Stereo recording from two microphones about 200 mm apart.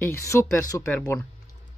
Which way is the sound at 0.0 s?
15° left (ahead or behind).